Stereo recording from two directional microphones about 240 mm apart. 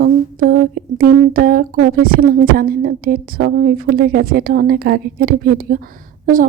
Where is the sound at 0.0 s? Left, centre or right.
Right.